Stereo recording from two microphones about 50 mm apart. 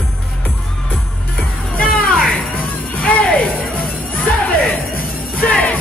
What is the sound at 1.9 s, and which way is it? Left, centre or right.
Music, left.